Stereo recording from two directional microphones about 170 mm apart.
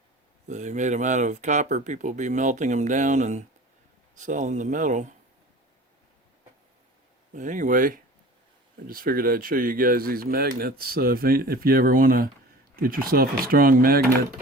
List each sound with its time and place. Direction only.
0.4 s speech: 45° right (ahead or behind)
7.3 s speech: 50° right (ahead or behind)